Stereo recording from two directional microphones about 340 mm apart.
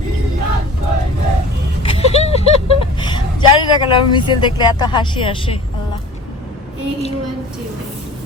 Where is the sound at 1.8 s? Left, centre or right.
Centre.